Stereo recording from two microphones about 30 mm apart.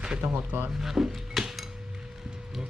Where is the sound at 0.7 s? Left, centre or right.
Centre.